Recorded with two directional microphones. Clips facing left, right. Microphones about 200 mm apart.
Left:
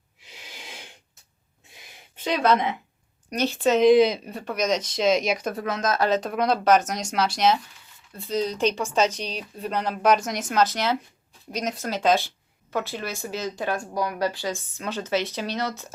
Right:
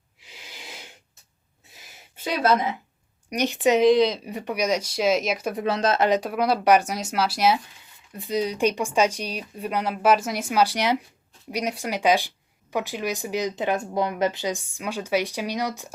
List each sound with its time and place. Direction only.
2.1 s speech: 10° right (ahead or behind)
3.2 s speech: 15° right (ahead or behind)
3.8 s speech: 5° left (ahead or behind)
4.3 s speech: 15° right (ahead or behind)
5.6 s speech: 30° right (ahead or behind)
6.1 s speech: 10° right (ahead or behind)